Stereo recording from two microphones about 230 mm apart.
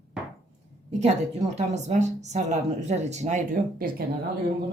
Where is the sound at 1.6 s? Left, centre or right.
Right.